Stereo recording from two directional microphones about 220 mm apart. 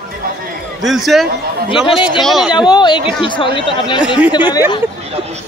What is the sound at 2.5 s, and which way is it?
Speech, 20° left (ahead or behind).